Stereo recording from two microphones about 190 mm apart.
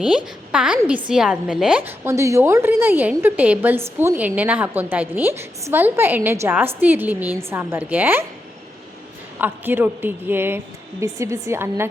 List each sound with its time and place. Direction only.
0.5 s a woman's voice: 5° right (ahead or behind)
9.4 s a woman's voice: 10° right (ahead or behind)